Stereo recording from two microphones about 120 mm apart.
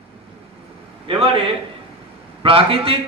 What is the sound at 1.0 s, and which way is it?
A man's voice, 50° right (ahead or behind).